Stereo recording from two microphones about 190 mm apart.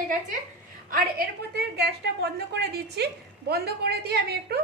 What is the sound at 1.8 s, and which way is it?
A woman's voice, 60° right (ahead or behind).